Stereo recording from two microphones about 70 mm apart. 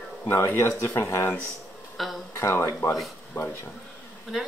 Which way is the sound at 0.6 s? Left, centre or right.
Left.